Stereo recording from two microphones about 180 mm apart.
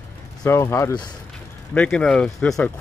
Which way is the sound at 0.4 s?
15° left (ahead or behind).